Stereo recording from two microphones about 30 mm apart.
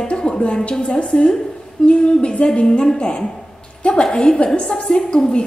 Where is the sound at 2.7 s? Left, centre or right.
Left.